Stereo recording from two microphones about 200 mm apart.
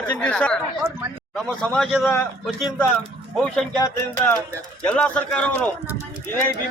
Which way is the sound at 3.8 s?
15° left (ahead or behind).